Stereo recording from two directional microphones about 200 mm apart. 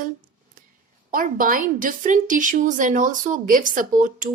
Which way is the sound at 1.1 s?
45° right (ahead or behind).